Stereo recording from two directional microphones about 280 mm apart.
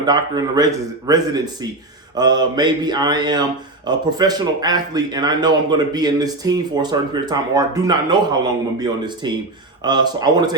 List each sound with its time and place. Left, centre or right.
0.0 s a man's voice: centre